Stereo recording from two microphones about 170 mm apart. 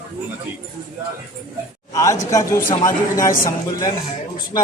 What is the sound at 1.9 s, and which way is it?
Speech, 20° left (ahead or behind).